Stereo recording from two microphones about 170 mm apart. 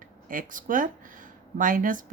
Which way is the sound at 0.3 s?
55° right (ahead or behind).